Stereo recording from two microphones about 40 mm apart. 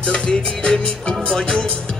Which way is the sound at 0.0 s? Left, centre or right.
Left.